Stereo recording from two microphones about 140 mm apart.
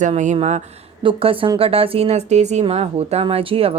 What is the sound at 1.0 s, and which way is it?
A woman's voice, 40° right (ahead or behind).